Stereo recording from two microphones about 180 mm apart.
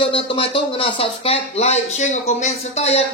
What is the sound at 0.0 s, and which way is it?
Speech, 30° left (ahead or behind).